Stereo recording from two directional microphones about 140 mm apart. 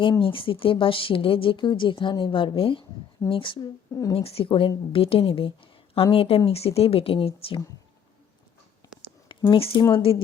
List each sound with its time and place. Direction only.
0.0 s a woman's voice: 40° left (ahead or behind)
9.5 s a woman's voice: 40° left (ahead or behind)